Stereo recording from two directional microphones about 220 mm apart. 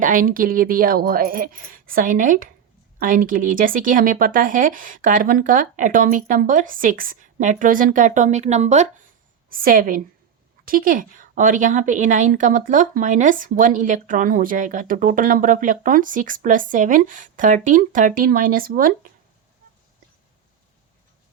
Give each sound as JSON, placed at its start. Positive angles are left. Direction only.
{"t": 0.0, "sound": "a woman's voice", "side_deg": -40}